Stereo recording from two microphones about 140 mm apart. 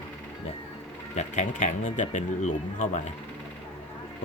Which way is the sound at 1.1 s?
55° left (ahead or behind).